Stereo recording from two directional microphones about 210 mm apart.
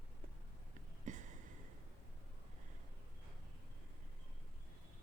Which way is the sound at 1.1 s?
35° right (ahead or behind).